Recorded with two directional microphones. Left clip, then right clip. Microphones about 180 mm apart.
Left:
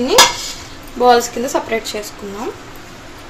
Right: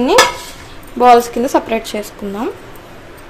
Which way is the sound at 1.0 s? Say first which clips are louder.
Right 3 dB; 50° right (ahead or behind).